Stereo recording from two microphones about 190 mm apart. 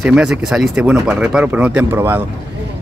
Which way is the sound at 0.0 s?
5° right (ahead or behind).